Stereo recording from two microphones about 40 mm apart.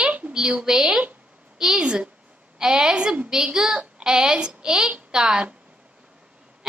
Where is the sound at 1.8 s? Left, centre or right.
Right.